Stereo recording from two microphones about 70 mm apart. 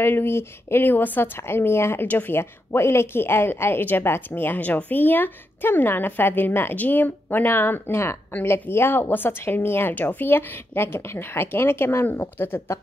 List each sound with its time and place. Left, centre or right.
0.0 s speech: left